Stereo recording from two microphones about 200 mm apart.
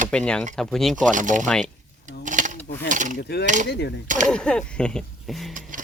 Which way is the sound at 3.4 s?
40° right (ahead or behind).